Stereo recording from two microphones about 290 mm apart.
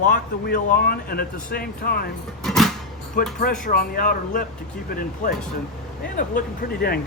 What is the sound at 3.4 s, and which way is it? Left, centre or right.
Speech, left.